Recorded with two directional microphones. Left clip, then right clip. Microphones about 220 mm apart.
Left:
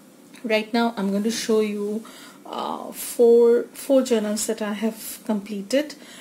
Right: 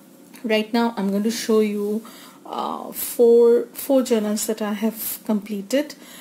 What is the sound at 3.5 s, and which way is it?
A woman's voice, 15° right (ahead or behind).